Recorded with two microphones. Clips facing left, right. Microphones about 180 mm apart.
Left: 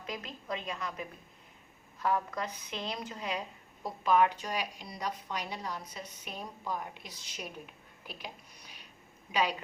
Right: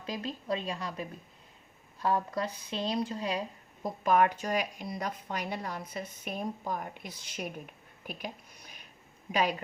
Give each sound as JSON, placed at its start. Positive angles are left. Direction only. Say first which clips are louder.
{"t": 0.0, "sound": "speech", "louder": "right 5 dB", "side_deg": -30}
{"t": 4.0, "sound": "speech", "louder": "right 1 dB", "side_deg": -50}
{"t": 9.3, "sound": "speech", "louder": "right 2 dB", "side_deg": -50}